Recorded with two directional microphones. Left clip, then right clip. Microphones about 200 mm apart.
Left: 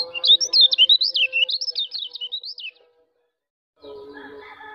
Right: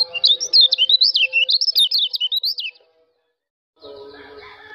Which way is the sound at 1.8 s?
35° right (ahead or behind).